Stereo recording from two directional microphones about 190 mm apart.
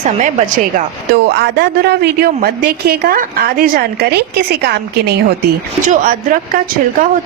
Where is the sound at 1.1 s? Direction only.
60° right (ahead or behind).